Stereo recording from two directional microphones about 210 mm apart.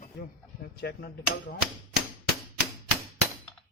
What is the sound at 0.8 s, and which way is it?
Speech, 50° left (ahead or behind).